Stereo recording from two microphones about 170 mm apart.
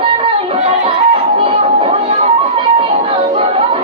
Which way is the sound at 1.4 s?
30° right (ahead or behind).